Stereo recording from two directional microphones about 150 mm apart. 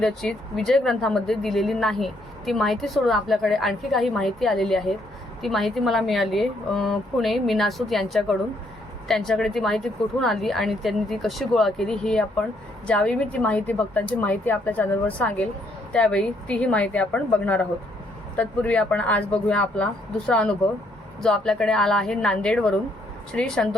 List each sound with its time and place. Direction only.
0.0 s a woman's voice: 5° left (ahead or behind)